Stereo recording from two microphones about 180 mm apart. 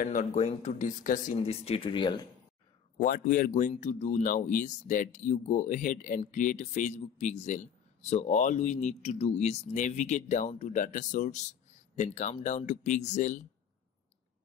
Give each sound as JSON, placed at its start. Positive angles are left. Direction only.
{"t": 0.0, "sound": "speech", "side_deg": 40}
{"t": 3.0, "sound": "speech", "side_deg": 45}